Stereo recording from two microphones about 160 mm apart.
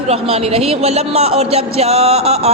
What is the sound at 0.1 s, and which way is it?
A man's voice, 40° right (ahead or behind).